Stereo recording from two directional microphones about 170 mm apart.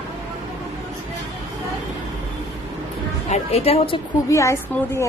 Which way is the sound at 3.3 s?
40° left (ahead or behind).